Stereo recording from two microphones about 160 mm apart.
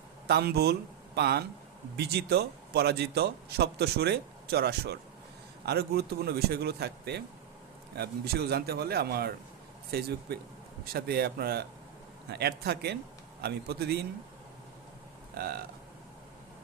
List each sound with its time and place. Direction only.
0.3 s a man's voice: 85° right
12.3 s a man's voice: 90° right
15.4 s speech: 70° right (ahead or behind)